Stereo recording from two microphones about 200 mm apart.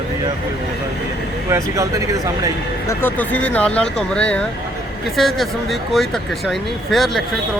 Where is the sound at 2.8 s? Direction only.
10° left (ahead or behind).